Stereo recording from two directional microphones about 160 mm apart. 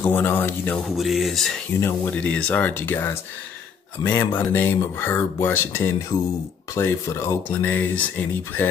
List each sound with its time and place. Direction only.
0.0 s speech: 10° left (ahead or behind)
0.8 s speech: centre (ahead or behind)
1.8 s speech: 10° left (ahead or behind)